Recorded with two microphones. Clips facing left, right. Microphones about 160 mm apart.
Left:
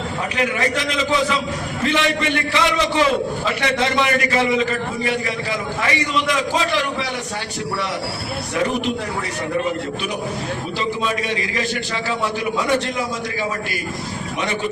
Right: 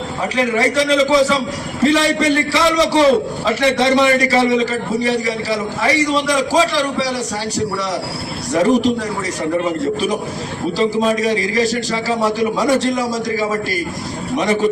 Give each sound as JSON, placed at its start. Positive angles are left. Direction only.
{"t": 0.3, "sound": "a man's voice", "side_deg": -35}
{"t": 8.5, "sound": "a man's voice", "side_deg": -40}
{"t": 10.8, "sound": "a man's voice", "side_deg": -40}
{"t": 14.3, "sound": "a man's voice", "side_deg": -40}